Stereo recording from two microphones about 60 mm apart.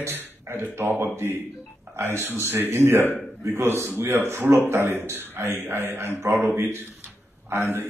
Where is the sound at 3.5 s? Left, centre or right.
Right.